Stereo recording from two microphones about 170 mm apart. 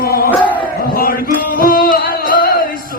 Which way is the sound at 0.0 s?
60° left (ahead or behind).